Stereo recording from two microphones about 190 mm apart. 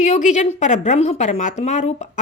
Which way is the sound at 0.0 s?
40° left (ahead or behind).